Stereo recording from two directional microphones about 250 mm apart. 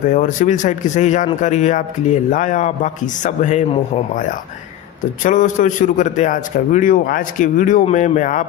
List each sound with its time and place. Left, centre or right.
0.1 s a man's voice: left